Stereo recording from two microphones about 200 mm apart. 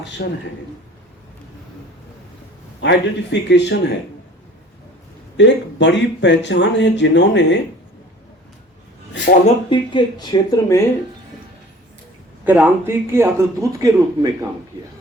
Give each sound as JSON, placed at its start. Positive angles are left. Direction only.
{"t": 0.2, "sound": "a man's voice", "side_deg": 50}
{"t": 2.8, "sound": "speech", "side_deg": 60}
{"t": 5.4, "sound": "speech", "side_deg": 60}
{"t": 9.5, "sound": "speech", "side_deg": 25}
{"t": 12.5, "sound": "speech", "side_deg": -10}